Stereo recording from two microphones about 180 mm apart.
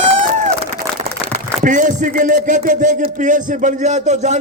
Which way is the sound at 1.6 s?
45° right (ahead or behind).